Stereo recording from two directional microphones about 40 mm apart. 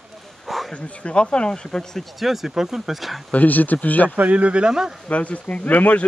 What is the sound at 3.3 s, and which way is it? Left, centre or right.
Speech, left.